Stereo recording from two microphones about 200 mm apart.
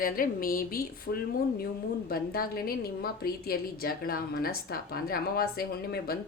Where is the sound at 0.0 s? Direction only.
45° left (ahead or behind).